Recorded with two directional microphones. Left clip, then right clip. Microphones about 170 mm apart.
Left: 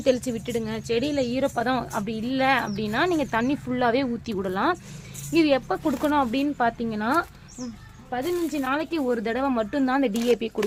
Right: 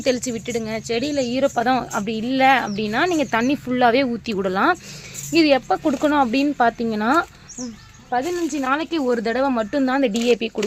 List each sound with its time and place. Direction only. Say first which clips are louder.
0.0 s speech: right 2 dB; 25° right (ahead or behind)